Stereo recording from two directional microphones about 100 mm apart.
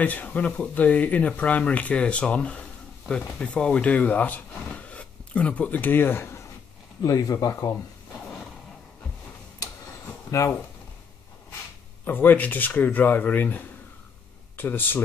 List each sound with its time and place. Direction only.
0.0 s speech: 15° left (ahead or behind)
7.0 s speech: 35° left (ahead or behind)
12.0 s speech: 20° left (ahead or behind)